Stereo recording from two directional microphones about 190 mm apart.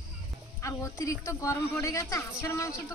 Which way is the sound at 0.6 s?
15° left (ahead or behind).